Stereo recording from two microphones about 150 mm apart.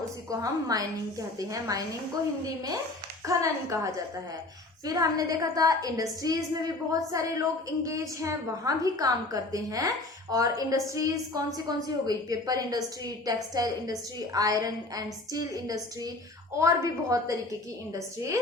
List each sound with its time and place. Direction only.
0.3 s a woman's voice: 25° right (ahead or behind)
3.2 s a woman's voice: 20° right (ahead or behind)